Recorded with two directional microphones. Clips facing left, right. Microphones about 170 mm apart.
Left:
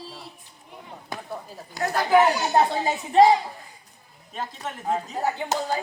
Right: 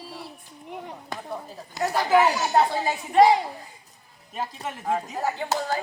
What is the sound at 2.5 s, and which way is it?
Speech, 20° left (ahead or behind).